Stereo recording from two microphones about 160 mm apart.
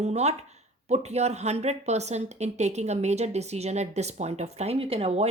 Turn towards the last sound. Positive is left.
turn(degrees=-40)  # may be behind; listen again after turning